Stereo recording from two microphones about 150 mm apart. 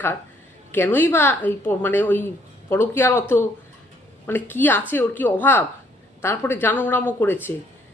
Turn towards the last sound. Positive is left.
turn(degrees=15)  # may be behind; listen again after turning